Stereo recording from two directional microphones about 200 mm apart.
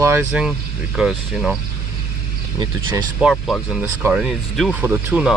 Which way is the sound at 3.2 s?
5° right (ahead or behind).